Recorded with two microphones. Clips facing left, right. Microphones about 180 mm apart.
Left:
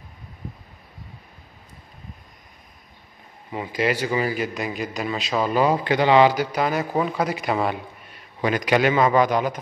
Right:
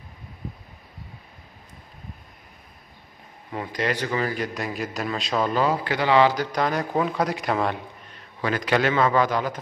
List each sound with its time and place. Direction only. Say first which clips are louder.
3.5 s a man's voice: left 3 dB; 5° left (ahead or behind)
8.4 s a man's voice: left 3 dB; 15° left (ahead or behind)